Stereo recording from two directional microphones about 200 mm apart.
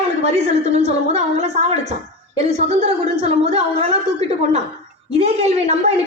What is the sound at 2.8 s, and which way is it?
Speech, 30° right (ahead or behind).